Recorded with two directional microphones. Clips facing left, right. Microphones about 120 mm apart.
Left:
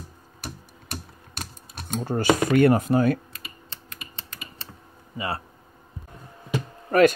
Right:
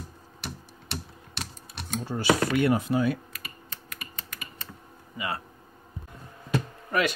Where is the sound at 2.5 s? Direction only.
50° left (ahead or behind).